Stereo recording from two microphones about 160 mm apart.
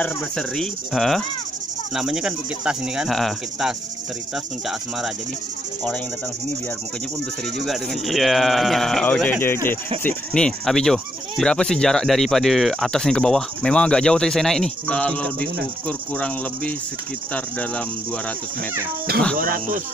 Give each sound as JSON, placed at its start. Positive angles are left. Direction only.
{"t": 0.0, "sound": "speech", "side_deg": 5}
{"t": 7.5, "sound": "speech", "side_deg": 0}
{"t": 19.3, "sound": "speech", "side_deg": -60}